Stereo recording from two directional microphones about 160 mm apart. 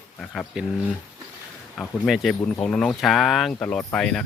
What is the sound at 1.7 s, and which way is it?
Speech, centre (ahead or behind).